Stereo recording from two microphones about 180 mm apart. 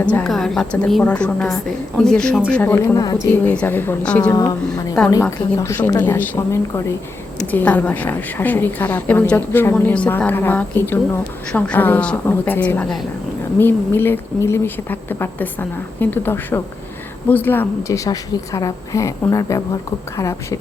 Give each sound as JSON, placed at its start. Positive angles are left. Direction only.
{"t": 0.0, "sound": "a woman's voice", "side_deg": 5}
{"t": 3.4, "sound": "a woman's voice", "side_deg": 10}
{"t": 4.3, "sound": "a woman's voice", "side_deg": 20}